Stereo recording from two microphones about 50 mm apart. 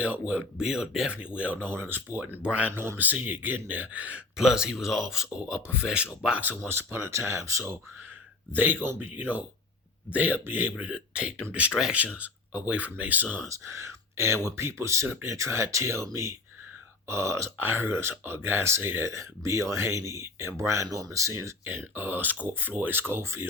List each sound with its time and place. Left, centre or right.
0.0 s speech: right
1.5 s speech: right
2.0 s speech: right
4.4 s speech: centre
6.4 s speech: right
7.1 s speech: right
8.5 s speech: right
10.8 s speech: right
13.7 s speech: right
17.1 s speech: right
17.6 s speech: right
18.1 s speech: right
21.9 s speech: right